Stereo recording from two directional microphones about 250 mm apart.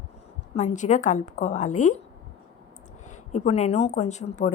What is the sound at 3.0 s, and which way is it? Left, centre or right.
A woman's voice, left.